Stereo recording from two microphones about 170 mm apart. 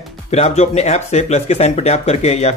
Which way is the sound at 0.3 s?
40° left (ahead or behind).